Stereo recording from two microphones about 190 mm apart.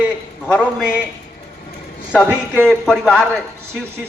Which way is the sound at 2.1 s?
5° left (ahead or behind).